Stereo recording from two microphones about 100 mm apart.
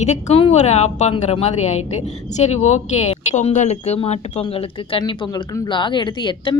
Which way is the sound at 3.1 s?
90° left.